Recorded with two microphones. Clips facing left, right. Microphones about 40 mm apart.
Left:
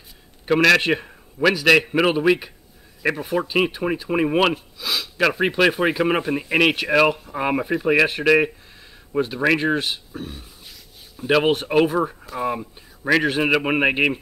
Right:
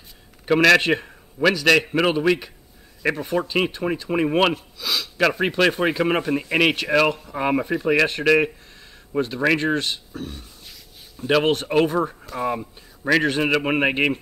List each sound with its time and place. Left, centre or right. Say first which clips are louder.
0.5 s speech: even; centre